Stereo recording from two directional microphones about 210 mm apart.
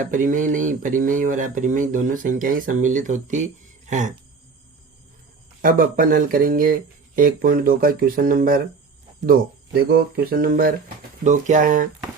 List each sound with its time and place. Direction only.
0.0 s speech: 40° right (ahead or behind)
5.6 s speech: 40° right (ahead or behind)